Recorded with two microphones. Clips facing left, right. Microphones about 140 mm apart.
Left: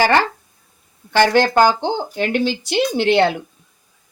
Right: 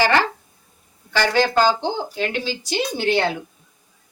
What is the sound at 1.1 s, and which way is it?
Speech, 55° left (ahead or behind).